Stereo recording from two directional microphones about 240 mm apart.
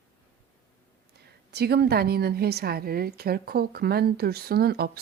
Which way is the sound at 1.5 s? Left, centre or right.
Right.